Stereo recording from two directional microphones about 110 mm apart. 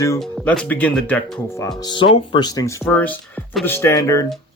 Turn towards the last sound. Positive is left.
turn(degrees=30)  # may be behind; listen again after turning